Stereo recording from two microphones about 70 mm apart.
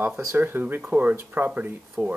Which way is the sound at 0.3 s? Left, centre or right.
Right.